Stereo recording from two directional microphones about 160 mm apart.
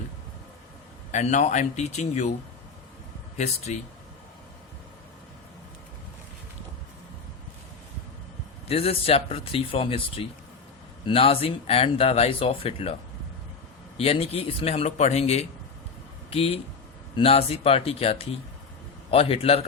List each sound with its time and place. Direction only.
1.1 s speech: 45° left (ahead or behind)
3.3 s speech: 45° left (ahead or behind)
8.6 s speech: 40° left (ahead or behind)